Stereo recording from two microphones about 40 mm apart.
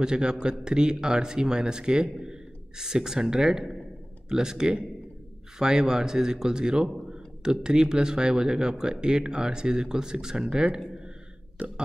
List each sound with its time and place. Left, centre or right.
0.0 s speech: centre
11.6 s burping: right